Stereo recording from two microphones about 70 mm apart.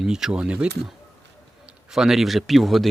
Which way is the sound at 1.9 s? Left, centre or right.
Centre.